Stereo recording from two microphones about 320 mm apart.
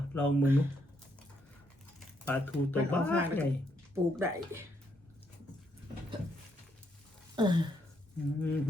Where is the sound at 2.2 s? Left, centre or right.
Centre.